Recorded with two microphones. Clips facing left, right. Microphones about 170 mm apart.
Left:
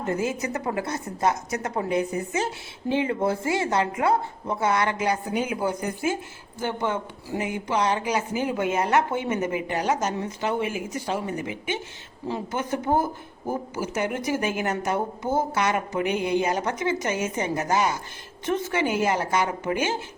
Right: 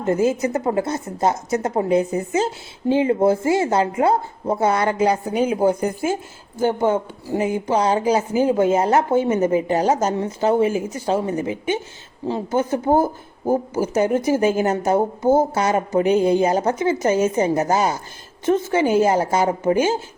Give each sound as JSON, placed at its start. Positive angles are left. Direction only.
{"t": 0.0, "sound": "a woman's voice", "side_deg": -30}
{"t": 6.6, "sound": "speech", "side_deg": -35}